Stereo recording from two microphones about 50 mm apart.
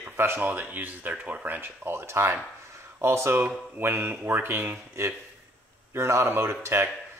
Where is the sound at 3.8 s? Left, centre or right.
Right.